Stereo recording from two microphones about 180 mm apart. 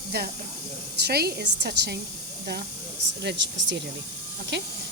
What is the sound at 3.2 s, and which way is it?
Speech, 75° right (ahead or behind).